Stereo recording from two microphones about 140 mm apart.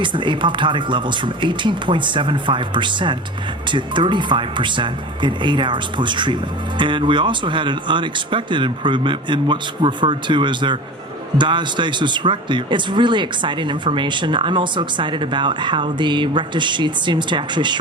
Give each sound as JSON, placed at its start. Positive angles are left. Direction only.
{"t": 0.0, "sound": "speech", "side_deg": -35}